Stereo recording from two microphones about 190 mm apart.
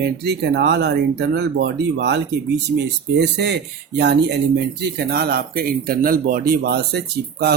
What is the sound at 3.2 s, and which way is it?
Speech, 65° right (ahead or behind).